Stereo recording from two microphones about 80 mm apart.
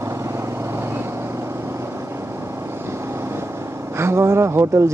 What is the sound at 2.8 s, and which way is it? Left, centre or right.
Vehicle, right.